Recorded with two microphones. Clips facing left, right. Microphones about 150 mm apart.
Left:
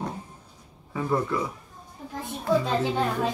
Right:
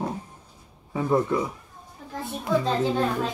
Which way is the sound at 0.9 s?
25° right (ahead or behind).